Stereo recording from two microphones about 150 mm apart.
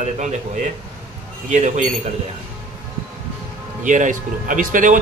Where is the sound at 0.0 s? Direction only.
50° right (ahead or behind).